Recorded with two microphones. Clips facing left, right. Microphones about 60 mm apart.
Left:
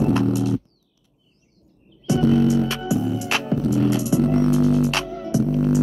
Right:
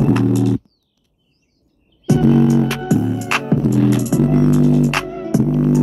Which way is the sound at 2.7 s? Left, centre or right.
Right.